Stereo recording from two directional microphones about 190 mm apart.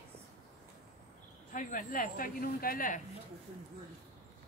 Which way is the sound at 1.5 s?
45° left (ahead or behind).